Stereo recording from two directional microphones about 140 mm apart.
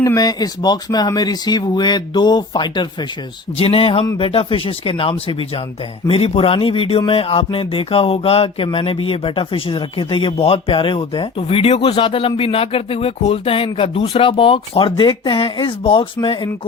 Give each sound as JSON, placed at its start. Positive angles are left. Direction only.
{"t": 0.0, "sound": "speech", "side_deg": 25}
{"t": 3.6, "sound": "a sound", "side_deg": 40}
{"t": 4.2, "sound": "speech", "side_deg": 40}